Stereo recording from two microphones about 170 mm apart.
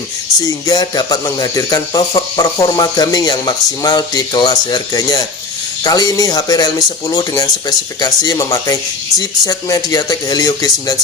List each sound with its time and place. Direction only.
0.4 s speech: 25° left (ahead or behind)